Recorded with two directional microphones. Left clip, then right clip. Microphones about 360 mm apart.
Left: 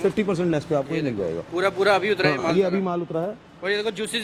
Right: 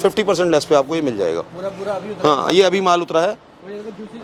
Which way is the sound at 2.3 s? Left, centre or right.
Centre.